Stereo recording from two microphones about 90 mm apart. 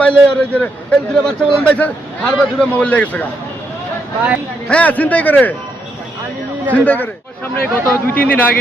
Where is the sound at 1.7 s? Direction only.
15° left (ahead or behind).